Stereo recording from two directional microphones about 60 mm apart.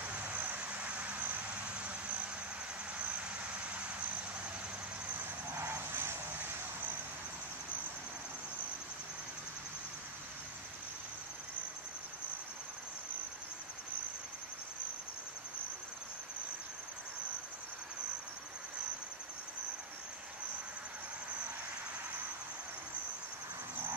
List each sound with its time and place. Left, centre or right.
0.2 s vehicle: right
5.5 s vehicle: right